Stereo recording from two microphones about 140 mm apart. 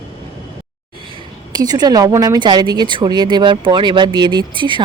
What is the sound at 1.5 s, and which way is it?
A woman's voice, 30° right (ahead or behind).